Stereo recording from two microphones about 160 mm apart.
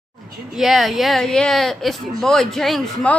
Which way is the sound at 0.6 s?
Centre (ahead or behind).